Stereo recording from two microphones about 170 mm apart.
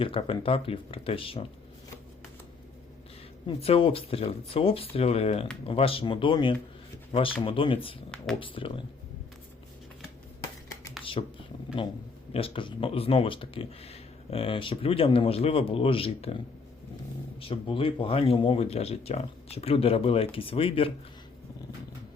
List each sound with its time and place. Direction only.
0.0 s speech: 30° left (ahead or behind)
3.4 s speech: 35° left (ahead or behind)
11.2 s speech: 35° left (ahead or behind)
17.5 s speech: 30° left (ahead or behind)